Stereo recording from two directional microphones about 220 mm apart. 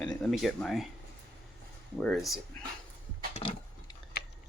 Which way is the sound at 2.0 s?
5° left (ahead or behind).